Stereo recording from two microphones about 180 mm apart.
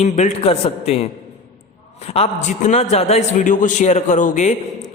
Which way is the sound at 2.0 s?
35° left (ahead or behind).